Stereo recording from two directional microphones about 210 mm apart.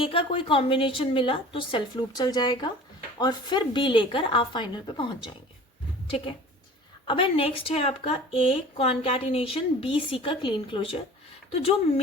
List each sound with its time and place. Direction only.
0.0 s speech: 25° left (ahead or behind)
7.1 s speech: 25° left (ahead or behind)